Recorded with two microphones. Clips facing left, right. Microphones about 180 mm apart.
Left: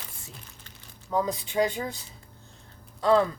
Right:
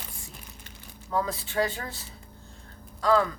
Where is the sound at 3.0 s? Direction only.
25° left (ahead or behind).